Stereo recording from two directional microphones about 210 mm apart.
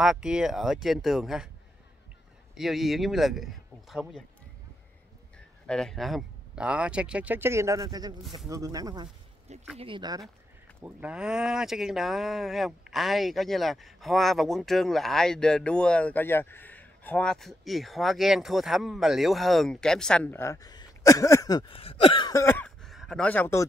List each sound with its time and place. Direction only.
0.0 s speech: 5° right (ahead or behind)
2.5 s speech: centre (ahead or behind)
5.7 s speech: 5° left (ahead or behind); by 10.2 s 20° right (ahead or behind)
10.8 s speech: 5° right (ahead or behind)